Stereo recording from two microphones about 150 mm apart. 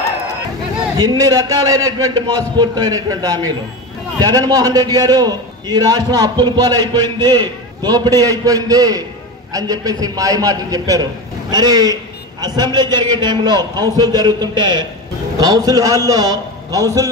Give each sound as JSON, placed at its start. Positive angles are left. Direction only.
{"t": 0.9, "sound": "a man's voice", "side_deg": -25}